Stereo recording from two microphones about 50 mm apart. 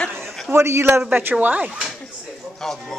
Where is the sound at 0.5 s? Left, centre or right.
Right.